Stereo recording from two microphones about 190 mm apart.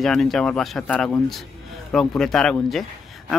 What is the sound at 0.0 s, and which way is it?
Speech, centre (ahead or behind).